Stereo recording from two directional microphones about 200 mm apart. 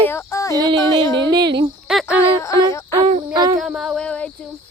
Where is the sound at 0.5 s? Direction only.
20° right (ahead or behind).